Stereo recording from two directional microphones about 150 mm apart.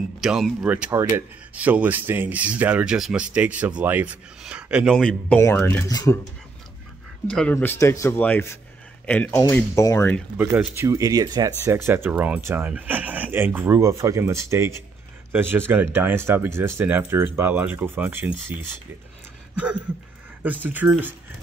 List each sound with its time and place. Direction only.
0.2 s speech: centre (ahead or behind)
4.9 s speech: 5° left (ahead or behind)
5.4 s speech: 15° left (ahead or behind)
7.2 s speech: 5° left (ahead or behind)
7.5 s speech: 15° left (ahead or behind)
10.3 s speech: 15° right (ahead or behind)
19.5 s a sound: 10° right (ahead or behind)
20.6 s speech: 10° right (ahead or behind)